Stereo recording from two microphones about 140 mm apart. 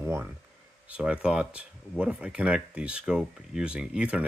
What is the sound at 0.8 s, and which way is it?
Speech, 10° right (ahead or behind).